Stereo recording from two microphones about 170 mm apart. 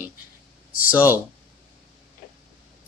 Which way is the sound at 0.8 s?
10° right (ahead or behind).